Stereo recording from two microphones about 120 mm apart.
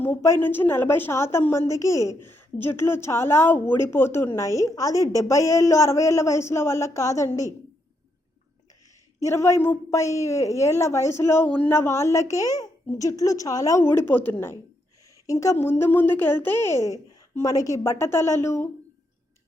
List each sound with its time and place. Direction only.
0.0 s a woman's voice: 20° left (ahead or behind)
9.2 s a woman's voice: 25° left (ahead or behind)
15.3 s a woman's voice: 25° left (ahead or behind)
15.8 s a woman's voice: 15° left (ahead or behind)